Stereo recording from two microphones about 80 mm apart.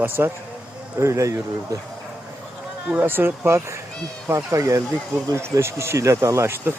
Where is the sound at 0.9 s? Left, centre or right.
Right.